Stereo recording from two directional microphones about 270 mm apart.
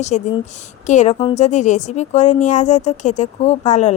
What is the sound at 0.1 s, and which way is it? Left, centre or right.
Speech, left.